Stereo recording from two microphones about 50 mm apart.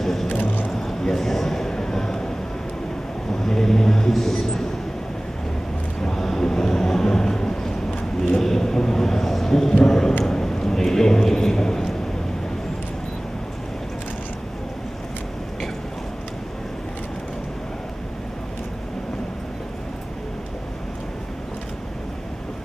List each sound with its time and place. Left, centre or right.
0.0 s vehicle: centre
0.3 s vehicle: left
0.8 s a sound: centre
3.4 s vehicle: centre
6.0 s vehicle: centre
9.8 s a sound: centre